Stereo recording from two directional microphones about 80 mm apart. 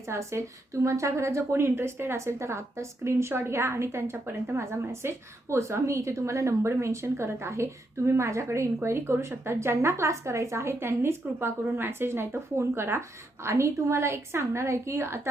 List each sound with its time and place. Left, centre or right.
0.1 s a woman's voice: right